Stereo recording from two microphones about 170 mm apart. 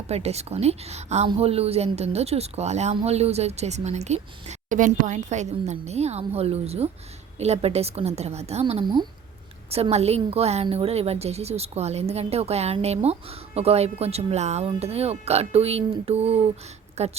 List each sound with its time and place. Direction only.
0.1 s a woman's voice: 40° right (ahead or behind)
8.8 s speech: 25° right (ahead or behind)
9.6 s a woman's voice: 35° right (ahead or behind)